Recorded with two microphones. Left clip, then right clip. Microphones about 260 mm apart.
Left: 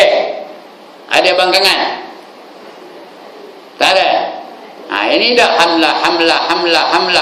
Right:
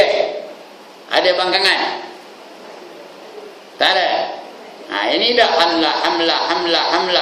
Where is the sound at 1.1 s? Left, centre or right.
Centre.